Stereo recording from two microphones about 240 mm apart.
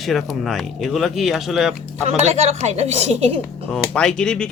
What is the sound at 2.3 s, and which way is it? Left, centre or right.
A woman's voice, right.